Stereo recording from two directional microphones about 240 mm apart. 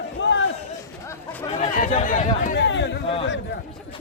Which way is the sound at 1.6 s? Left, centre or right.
Left.